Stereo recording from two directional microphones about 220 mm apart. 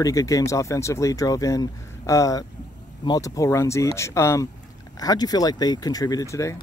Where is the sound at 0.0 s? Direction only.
15° left (ahead or behind).